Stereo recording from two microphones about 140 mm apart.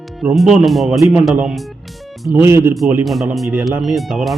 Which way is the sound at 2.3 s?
15° right (ahead or behind).